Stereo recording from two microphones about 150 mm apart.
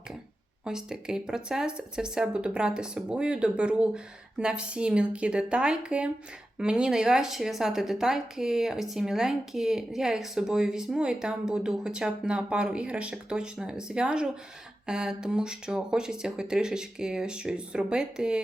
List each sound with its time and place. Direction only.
0.6 s speech: 5° right (ahead or behind)